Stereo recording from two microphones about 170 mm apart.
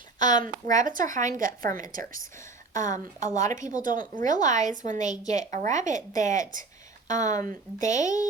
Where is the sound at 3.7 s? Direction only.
50° right (ahead or behind).